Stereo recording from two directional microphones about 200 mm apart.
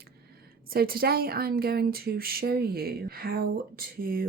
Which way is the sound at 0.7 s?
50° right (ahead or behind).